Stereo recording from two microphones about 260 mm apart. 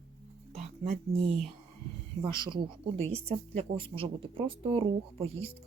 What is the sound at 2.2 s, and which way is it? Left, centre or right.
Speech, centre.